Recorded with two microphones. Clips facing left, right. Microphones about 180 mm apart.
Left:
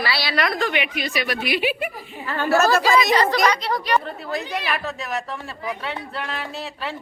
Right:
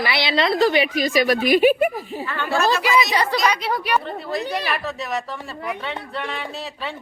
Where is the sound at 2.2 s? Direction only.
35° left (ahead or behind).